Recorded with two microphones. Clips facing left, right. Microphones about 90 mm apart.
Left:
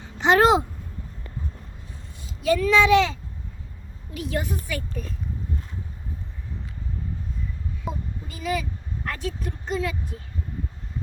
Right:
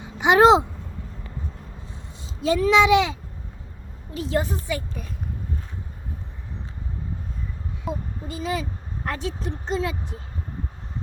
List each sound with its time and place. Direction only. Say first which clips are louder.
0.0 s a sound: right 3 dB; 15° right (ahead or behind)
2.4 s speech: right 1 dB; 20° right (ahead or behind)
4.1 s speech: right 3 dB; 30° right (ahead or behind)
8.3 s speech: even; 25° right (ahead or behind)